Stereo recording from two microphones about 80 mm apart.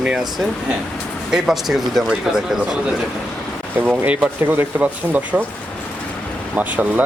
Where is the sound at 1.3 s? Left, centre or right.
Centre.